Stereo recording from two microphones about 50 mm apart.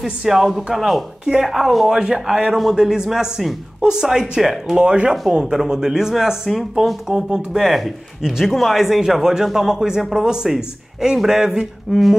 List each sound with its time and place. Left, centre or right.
0.0 s speech: centre
1.2 s speech: centre
1.5 s speech: centre
4.7 s speech: right
5.4 s speech: centre